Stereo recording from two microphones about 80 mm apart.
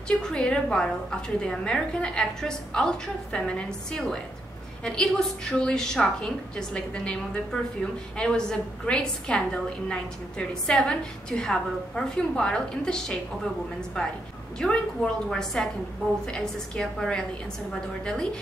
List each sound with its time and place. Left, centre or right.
0.2 s a woman's voice: centre
14.6 s a woman's voice: centre